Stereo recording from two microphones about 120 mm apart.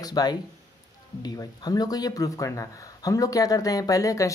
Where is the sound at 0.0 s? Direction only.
35° left (ahead or behind).